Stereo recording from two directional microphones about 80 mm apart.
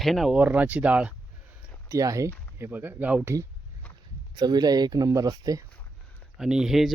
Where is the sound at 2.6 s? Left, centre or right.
Right.